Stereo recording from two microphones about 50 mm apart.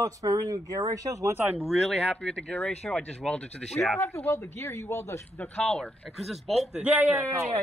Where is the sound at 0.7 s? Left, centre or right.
Right.